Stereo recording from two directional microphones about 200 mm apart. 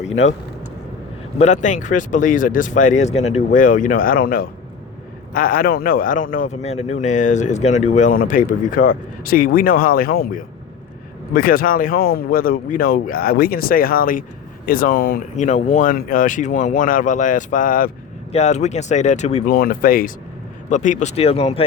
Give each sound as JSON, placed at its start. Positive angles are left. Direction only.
{"t": 1.4, "sound": "speech", "side_deg": 35}
{"t": 18.3, "sound": "speech", "side_deg": 35}